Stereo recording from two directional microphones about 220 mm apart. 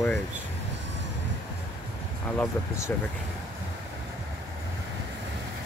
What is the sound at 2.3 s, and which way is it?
Speech, 10° left (ahead or behind).